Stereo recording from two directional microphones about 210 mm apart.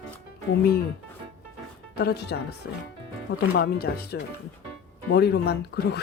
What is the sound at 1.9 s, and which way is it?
Speech, 50° left (ahead or behind).